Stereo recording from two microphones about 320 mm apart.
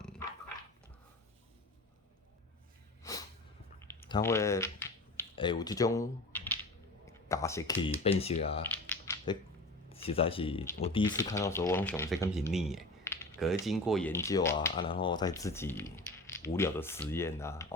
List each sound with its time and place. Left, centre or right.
3.0 s a sound: centre
3.8 s typing: centre
7.1 s speech: centre
8.0 s speech: centre
8.9 s a sound: centre
9.9 s speech: centre